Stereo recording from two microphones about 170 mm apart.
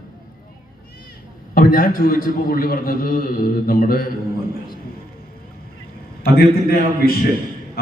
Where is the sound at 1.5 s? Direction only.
55° left (ahead or behind).